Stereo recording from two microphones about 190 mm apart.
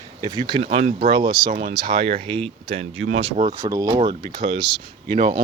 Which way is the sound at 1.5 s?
45° right (ahead or behind).